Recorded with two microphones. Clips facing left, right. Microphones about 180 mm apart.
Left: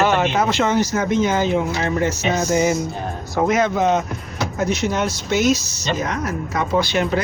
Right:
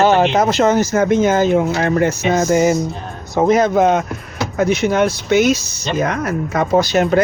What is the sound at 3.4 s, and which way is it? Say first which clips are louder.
Speech: right 5 dB; 35° right (ahead or behind).